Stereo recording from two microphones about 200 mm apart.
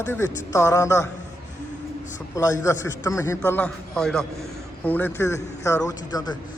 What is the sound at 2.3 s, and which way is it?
A man's voice, 15° left (ahead or behind).